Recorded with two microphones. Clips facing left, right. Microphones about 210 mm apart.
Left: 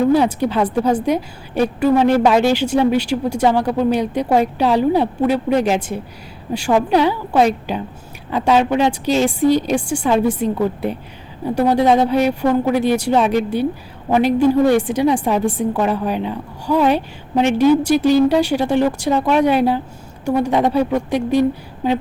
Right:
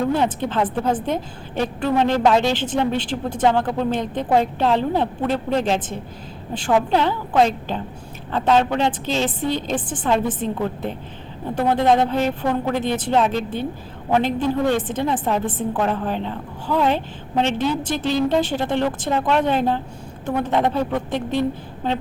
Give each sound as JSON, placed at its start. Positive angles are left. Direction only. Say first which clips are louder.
{"t": 0.1, "sound": "a woman's voice", "louder": "left 6 dB", "side_deg": 10}